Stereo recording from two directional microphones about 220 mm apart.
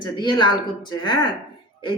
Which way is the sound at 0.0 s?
20° left (ahead or behind).